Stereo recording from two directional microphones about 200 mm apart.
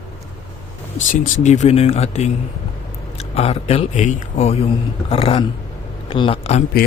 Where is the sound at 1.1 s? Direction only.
40° left (ahead or behind).